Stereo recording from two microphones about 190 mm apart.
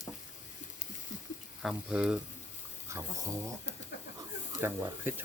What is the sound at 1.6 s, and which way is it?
Sizzle, 5° right (ahead or behind).